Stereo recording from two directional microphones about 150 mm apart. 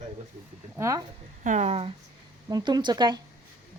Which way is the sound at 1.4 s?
50° right (ahead or behind).